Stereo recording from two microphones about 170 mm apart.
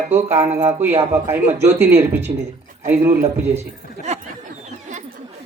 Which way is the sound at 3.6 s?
40° right (ahead or behind).